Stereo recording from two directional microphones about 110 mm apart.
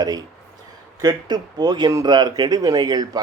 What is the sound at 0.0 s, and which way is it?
Speech, 35° right (ahead or behind).